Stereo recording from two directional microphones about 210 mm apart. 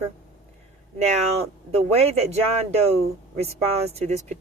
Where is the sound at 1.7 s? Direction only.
30° right (ahead or behind).